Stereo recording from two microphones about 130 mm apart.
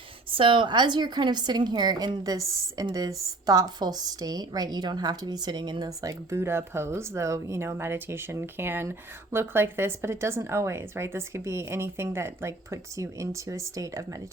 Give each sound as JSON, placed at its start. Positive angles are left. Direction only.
{"t": 0.3, "sound": "a woman's voice", "side_deg": -40}